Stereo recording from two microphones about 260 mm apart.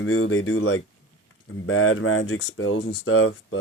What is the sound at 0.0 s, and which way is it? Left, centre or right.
Speech, left.